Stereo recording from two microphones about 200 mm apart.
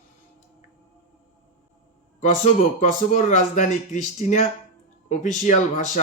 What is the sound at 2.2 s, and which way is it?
Speech, 35° left (ahead or behind).